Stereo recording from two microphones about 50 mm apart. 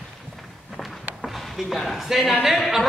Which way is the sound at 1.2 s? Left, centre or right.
Centre.